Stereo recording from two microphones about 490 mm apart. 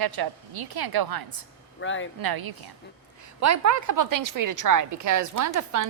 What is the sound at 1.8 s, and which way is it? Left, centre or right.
Speech, left.